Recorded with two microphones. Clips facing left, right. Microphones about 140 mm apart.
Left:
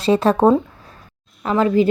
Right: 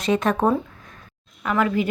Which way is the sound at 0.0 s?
30° left (ahead or behind).